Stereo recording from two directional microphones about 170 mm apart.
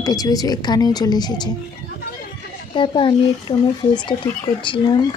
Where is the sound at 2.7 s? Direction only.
30° left (ahead or behind).